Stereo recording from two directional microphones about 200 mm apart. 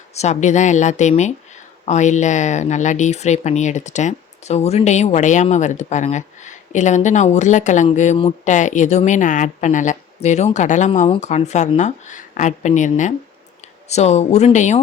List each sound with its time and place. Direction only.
0.1 s speech: 35° left (ahead or behind)